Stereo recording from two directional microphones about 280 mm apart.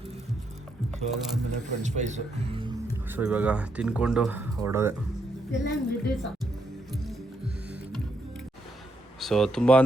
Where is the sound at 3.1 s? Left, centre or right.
Centre.